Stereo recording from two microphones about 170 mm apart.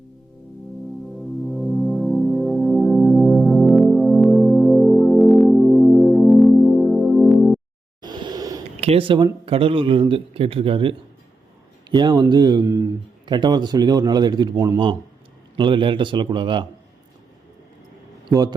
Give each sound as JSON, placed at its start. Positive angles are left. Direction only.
{"t": 1.5, "sound": "music", "side_deg": 0}
{"t": 8.0, "sound": "a sound", "side_deg": -25}
{"t": 8.8, "sound": "speech", "side_deg": -35}
{"t": 15.5, "sound": "speech", "side_deg": -30}
{"t": 18.3, "sound": "a man's voice", "side_deg": -20}